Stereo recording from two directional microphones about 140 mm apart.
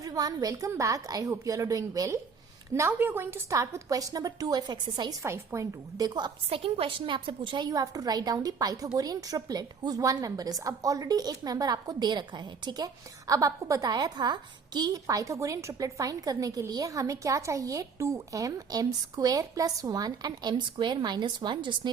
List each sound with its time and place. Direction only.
0.0 s a woman's voice: 25° right (ahead or behind)
5.2 s a woman's voice: 20° right (ahead or behind)